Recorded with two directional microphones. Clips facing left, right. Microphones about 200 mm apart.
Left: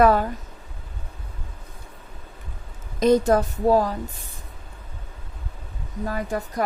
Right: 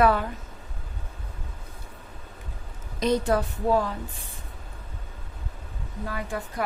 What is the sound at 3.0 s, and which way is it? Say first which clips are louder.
Speech: left 6 dB; 45° left (ahead or behind).